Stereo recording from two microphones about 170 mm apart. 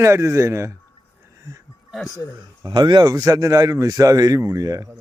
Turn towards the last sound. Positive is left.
turn(degrees=-20)  # may be behind; listen again after turning